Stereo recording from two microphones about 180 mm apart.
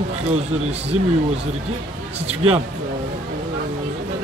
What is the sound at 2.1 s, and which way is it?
Speech, 35° right (ahead or behind).